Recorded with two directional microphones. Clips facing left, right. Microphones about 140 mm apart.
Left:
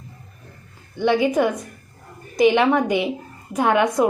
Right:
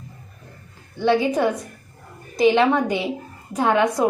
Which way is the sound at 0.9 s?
15° left (ahead or behind).